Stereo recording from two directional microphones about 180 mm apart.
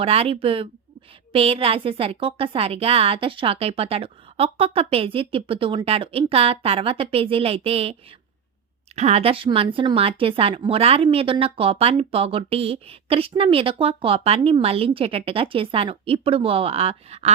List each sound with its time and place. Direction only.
0.0 s speech: 35° right (ahead or behind)
9.0 s speech: 35° right (ahead or behind)